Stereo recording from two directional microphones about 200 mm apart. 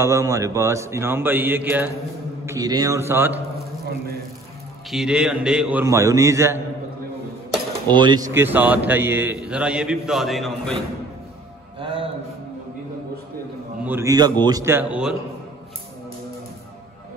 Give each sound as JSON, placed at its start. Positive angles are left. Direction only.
{"t": 0.0, "sound": "a man's voice", "side_deg": -15}
{"t": 4.9, "sound": "a man's voice", "side_deg": -5}
{"t": 7.9, "sound": "a man's voice", "side_deg": -20}
{"t": 11.8, "sound": "a sound", "side_deg": -25}
{"t": 13.8, "sound": "a man's voice", "side_deg": -15}